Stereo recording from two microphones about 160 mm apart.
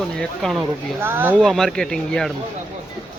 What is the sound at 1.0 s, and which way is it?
Speech, 15° right (ahead or behind).